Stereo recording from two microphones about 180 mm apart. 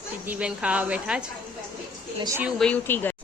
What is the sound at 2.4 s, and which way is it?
Speech, 5° left (ahead or behind).